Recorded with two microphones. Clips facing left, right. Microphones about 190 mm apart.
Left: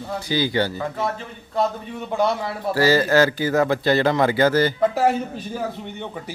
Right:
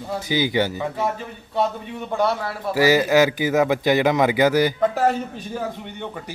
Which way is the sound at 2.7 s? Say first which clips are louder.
Right 1 dB; 15° right (ahead or behind).